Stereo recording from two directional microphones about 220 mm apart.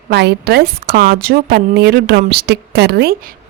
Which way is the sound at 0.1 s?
50° right (ahead or behind).